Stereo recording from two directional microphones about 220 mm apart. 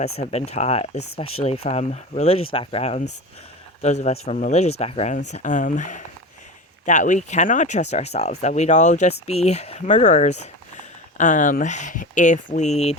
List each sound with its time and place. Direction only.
0.0 s speech: 30° left (ahead or behind)